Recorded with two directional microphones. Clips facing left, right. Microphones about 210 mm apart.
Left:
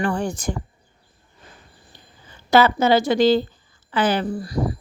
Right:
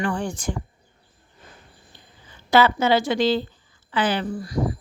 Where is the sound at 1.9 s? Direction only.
40° left (ahead or behind).